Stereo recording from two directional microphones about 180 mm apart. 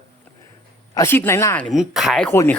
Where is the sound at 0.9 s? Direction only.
15° left (ahead or behind).